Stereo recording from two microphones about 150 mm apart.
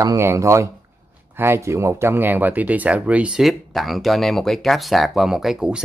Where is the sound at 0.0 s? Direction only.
20° right (ahead or behind).